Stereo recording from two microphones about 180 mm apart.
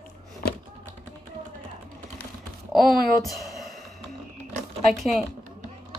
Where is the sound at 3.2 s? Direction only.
Centre (ahead or behind).